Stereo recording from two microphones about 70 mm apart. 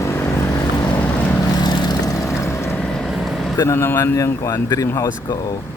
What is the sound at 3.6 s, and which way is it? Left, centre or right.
Speech, left.